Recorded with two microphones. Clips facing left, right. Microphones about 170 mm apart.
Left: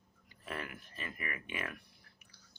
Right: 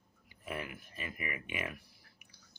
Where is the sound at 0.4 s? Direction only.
10° right (ahead or behind).